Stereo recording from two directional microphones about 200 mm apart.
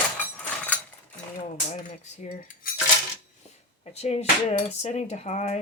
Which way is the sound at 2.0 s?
35° left (ahead or behind).